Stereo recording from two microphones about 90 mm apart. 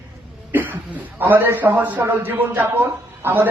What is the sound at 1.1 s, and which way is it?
A man's voice, 20° right (ahead or behind).